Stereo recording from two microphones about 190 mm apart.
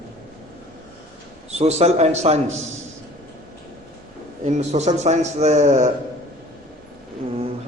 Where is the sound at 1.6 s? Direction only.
35° right (ahead or behind).